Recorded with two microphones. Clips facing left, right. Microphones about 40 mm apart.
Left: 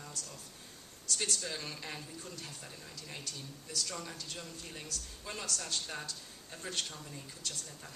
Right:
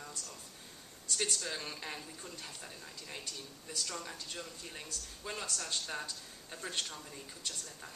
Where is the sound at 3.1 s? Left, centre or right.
Right.